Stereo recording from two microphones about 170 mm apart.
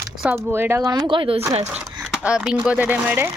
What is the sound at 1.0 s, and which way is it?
Speech, 30° right (ahead or behind).